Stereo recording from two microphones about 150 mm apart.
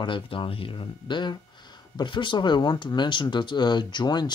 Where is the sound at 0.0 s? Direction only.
35° left (ahead or behind).